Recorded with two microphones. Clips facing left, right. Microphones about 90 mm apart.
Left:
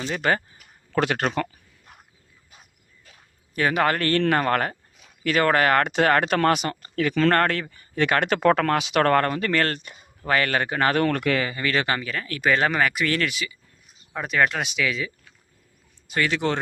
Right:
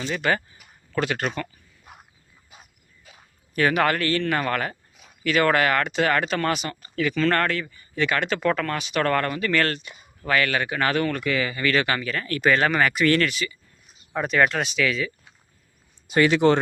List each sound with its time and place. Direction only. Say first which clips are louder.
0.1 s speech: left 1 dB; 35° left (ahead or behind)
0.9 s speech: left 2 dB; 60° left (ahead or behind)
3.5 s speech: right 1 dB; 20° left (ahead or behind)
3.9 s speech: left 2 dB; 45° left (ahead or behind); by 9.0 s 70° left (ahead or behind)
9.0 s speech: left 3 dB; 45° left (ahead or behind)
11.0 s speech: left 3 dB; 55° left (ahead or behind)
11.3 s speech: right 1 dB; 30° left (ahead or behind)
12.0 s speech: right 2 dB; 5° left (ahead or behind)
12.5 s speech: right 1 dB; 20° left (ahead or behind)
12.8 s speech: right 3 dB; 5° left (ahead or behind)
14.5 s speech: right 2 dB; 15° left (ahead or behind)
16.0 s speech: right 6 dB; 20° right (ahead or behind)